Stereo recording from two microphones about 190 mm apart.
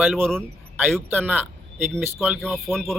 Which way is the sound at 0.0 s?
Centre (ahead or behind).